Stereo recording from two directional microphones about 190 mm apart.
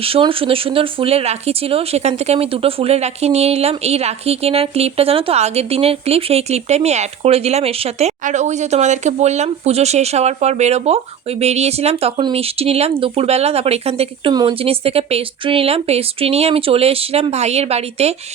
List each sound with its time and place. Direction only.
0.0 s speech: 30° right (ahead or behind)